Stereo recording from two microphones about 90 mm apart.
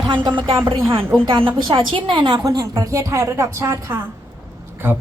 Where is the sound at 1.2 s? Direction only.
65° right (ahead or behind).